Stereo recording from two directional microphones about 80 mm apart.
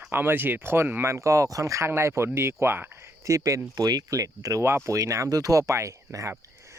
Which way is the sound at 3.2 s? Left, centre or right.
Right.